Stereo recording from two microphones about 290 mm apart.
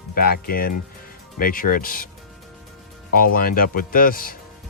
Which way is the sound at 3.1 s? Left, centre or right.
Left.